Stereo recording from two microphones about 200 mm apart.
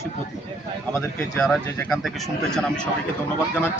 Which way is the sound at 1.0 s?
5° left (ahead or behind).